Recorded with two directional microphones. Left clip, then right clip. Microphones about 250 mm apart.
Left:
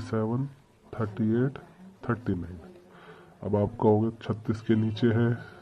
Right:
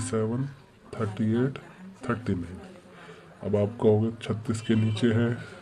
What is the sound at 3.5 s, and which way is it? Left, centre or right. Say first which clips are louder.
A man's voice: right 1 dB; centre.